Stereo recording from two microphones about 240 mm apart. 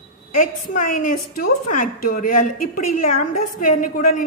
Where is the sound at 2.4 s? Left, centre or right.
Left.